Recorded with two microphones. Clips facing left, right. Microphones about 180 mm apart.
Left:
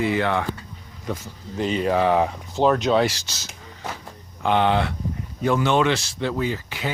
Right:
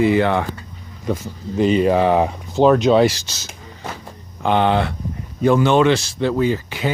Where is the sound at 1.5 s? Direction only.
10° right (ahead or behind).